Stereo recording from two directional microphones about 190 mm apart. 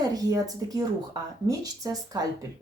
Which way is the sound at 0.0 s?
20° right (ahead or behind).